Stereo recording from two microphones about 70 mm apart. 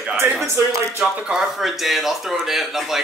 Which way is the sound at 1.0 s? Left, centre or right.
Centre.